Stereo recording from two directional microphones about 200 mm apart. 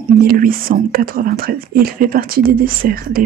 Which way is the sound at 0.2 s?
45° right (ahead or behind).